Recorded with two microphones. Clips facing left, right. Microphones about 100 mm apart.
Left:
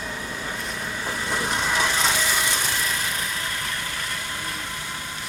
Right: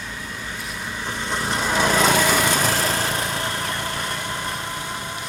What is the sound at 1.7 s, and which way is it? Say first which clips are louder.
Lawn mower: right 8 dB; 45° right (ahead or behind).